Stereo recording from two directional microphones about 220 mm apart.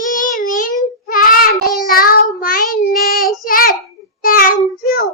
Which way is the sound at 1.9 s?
40° left (ahead or behind).